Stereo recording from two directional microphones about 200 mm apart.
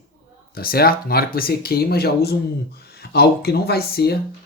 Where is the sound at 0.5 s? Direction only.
50° left (ahead or behind).